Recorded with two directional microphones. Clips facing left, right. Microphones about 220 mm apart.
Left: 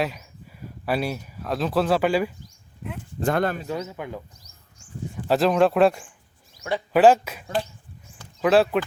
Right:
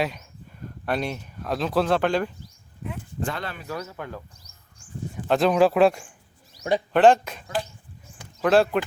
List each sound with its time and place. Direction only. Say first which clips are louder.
0.0 s speech: even; 5° left (ahead or behind)
3.2 s speech: left 10 dB; 45° left (ahead or behind)
3.6 s speech: left 3 dB; 20° left (ahead or behind)
5.3 s speech: even; centre (ahead or behind)
6.6 s speech: right 4 dB; 20° right (ahead or behind)
6.9 s speech: left 1 dB; 5° left (ahead or behind)